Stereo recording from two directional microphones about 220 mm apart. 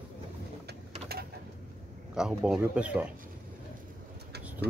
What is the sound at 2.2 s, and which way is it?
Speech, 5° right (ahead or behind).